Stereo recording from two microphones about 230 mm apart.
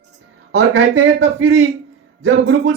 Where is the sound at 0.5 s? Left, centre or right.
Right.